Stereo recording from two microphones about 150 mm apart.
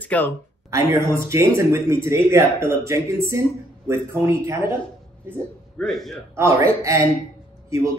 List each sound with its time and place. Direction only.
0.0 s speech: 10° left (ahead or behind)
0.7 s speech: 20° right (ahead or behind)
5.8 s a man's voice: centre (ahead or behind)
6.3 s speech: 20° right (ahead or behind)